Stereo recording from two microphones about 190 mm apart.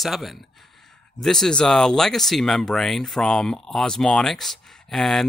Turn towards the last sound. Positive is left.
turn(degrees=0)  # may be behind; listen again after turning